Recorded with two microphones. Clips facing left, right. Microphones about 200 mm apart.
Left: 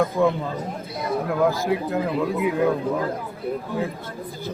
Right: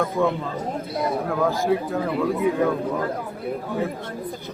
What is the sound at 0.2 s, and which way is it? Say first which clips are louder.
Speech: left 1 dB; 5° left (ahead or behind).